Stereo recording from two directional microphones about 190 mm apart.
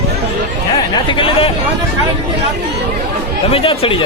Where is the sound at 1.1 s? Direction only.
30° left (ahead or behind).